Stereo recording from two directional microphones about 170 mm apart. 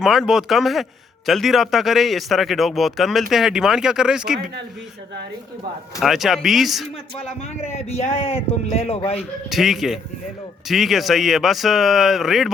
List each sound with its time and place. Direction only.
0.0 s speech: centre (ahead or behind)
6.0 s speech: centre (ahead or behind)
7.2 s a man's voice: 40° left (ahead or behind)
9.5 s speech: centre (ahead or behind)